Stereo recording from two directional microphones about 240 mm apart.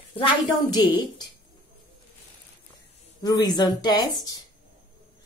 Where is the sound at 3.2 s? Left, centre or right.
Centre.